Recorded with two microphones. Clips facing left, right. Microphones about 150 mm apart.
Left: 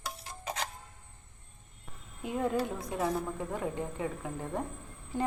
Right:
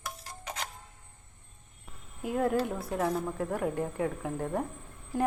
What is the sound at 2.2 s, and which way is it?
A woman's voice, 10° right (ahead or behind).